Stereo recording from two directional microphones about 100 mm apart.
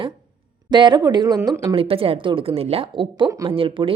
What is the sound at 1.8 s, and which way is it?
Speech, 65° right (ahead or behind).